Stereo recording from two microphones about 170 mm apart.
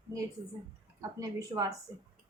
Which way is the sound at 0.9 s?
20° right (ahead or behind).